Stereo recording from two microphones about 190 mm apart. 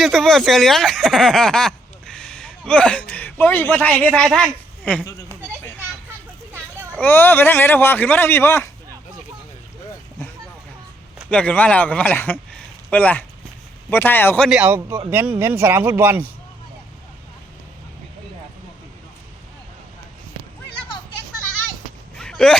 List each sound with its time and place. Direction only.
0.0 s speech: centre (ahead or behind)
6.5 s children playing: 10° right (ahead or behind)
7.0 s speech: 10° left (ahead or behind)
11.2 s speech: 5° left (ahead or behind)
14.6 s speech: 10° right (ahead or behind)
22.1 s a sound: 5° left (ahead or behind)